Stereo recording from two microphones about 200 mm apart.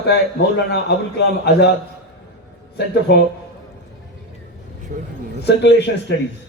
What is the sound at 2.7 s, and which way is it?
Speech, 60° left (ahead or behind).